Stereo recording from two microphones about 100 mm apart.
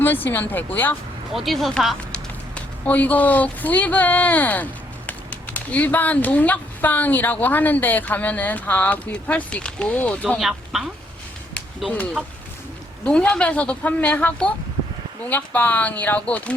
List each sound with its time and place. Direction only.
0.0 s speech: 20° left (ahead or behind)
1.5 s speech: centre (ahead or behind)
2.6 s speech: 15° left (ahead or behind)
10.4 s speech: 5° right (ahead or behind)
13.1 s speech: 10° left (ahead or behind)